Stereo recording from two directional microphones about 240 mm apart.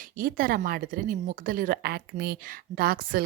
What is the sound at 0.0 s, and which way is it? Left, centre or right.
Speech, right.